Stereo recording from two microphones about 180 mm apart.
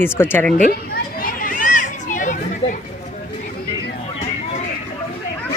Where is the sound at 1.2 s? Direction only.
50° left (ahead or behind).